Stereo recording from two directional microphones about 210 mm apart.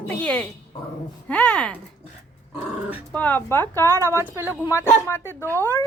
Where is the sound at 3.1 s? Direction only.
10° left (ahead or behind).